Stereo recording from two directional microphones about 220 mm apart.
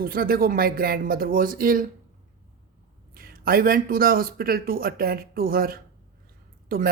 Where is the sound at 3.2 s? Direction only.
40° right (ahead or behind).